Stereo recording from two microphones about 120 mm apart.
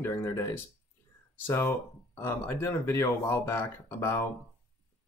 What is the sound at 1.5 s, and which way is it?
Speech, 20° left (ahead or behind).